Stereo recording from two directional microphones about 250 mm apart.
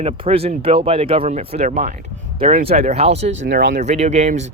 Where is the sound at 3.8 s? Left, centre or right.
Right.